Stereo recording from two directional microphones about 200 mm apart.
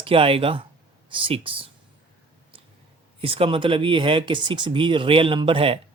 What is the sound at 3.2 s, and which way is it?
Speech, 25° right (ahead or behind).